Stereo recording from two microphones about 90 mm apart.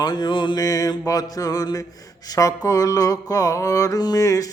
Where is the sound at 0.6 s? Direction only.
45° left (ahead or behind).